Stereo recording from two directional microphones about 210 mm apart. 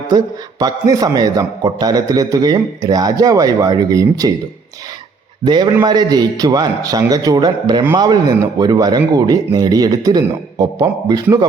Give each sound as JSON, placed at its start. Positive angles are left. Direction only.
{"t": 0.6, "sound": "a man's voice", "side_deg": -15}
{"t": 5.5, "sound": "speech", "side_deg": -20}